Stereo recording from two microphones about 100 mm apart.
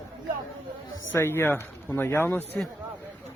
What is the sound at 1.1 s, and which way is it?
Speech, 20° left (ahead or behind).